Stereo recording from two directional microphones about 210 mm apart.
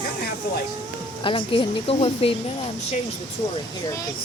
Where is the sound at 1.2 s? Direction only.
25° left (ahead or behind).